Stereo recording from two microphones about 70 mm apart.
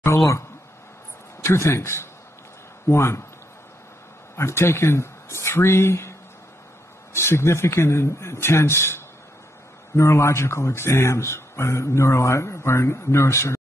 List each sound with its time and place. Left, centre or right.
1.4 s speech: left
4.4 s speech: left